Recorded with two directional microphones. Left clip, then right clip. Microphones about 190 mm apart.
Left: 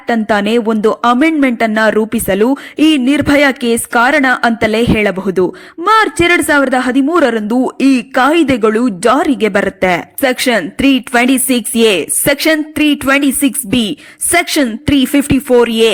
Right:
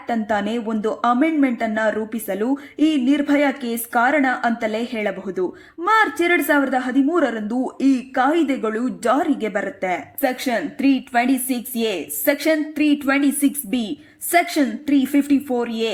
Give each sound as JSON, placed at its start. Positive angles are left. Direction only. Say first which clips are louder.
{"t": 0.1, "sound": "speech", "louder": "left 10 dB", "side_deg": 40}